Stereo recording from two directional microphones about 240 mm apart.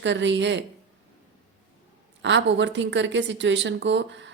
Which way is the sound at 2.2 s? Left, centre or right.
Right.